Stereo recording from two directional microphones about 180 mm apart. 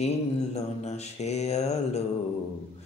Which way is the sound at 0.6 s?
40° left (ahead or behind).